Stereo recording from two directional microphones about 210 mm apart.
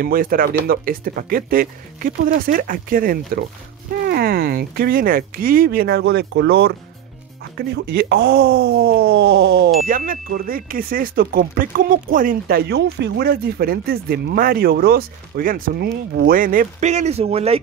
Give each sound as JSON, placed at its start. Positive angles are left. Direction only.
{"t": 0.0, "sound": "speech", "side_deg": -45}